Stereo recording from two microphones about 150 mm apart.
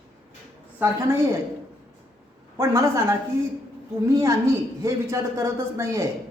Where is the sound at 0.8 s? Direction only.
15° right (ahead or behind).